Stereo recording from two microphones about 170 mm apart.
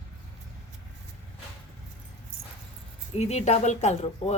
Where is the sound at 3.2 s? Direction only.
40° left (ahead or behind).